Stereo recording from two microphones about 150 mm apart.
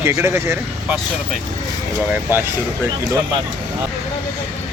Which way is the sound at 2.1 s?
15° right (ahead or behind).